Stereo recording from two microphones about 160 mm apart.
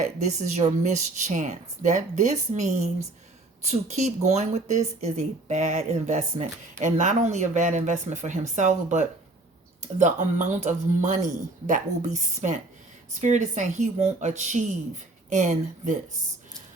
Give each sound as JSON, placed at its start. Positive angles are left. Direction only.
{"t": 0.0, "sound": "speech", "side_deg": -45}